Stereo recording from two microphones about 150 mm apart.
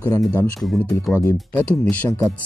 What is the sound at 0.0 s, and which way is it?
Speech, 20° left (ahead or behind).